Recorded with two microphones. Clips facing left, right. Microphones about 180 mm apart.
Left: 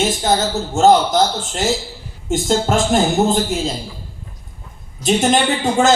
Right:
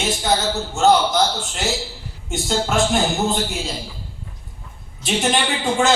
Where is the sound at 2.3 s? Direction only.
45° left (ahead or behind).